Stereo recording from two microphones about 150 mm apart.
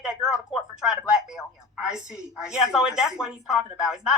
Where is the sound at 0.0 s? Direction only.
5° right (ahead or behind).